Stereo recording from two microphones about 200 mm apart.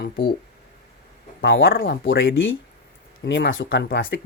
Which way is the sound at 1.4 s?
65° left (ahead or behind).